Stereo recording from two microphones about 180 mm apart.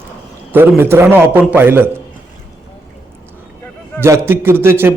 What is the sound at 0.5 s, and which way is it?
A man's voice, 10° right (ahead or behind).